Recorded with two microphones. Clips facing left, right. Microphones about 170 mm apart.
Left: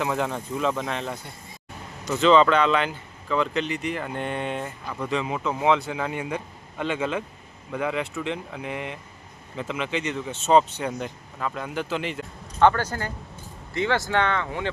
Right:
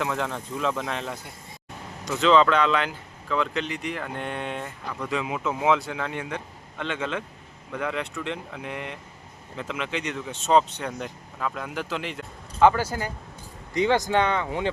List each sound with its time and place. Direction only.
0.0 s speech: 5° left (ahead or behind); by 14.7 s 15° right (ahead or behind)